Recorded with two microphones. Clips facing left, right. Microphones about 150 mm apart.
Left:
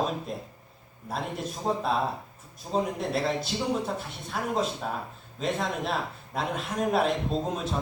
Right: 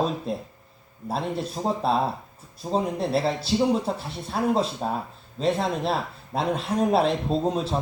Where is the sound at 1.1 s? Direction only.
30° right (ahead or behind).